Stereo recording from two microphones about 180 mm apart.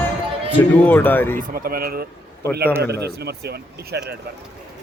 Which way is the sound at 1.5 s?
55° right (ahead or behind).